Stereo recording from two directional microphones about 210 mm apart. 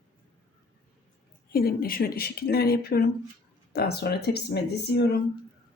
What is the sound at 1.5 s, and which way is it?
Speech, 45° left (ahead or behind).